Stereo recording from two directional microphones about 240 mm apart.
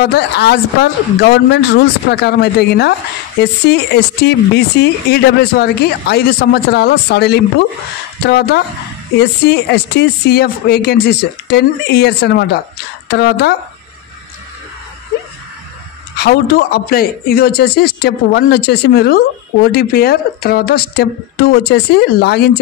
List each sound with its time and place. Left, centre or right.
0.0 s a man's voice: left
16.2 s a man's voice: left